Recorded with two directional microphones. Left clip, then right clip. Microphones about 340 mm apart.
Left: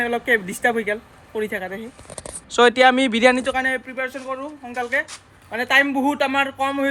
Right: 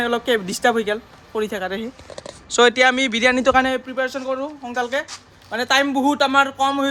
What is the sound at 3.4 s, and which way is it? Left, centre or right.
Speech, right.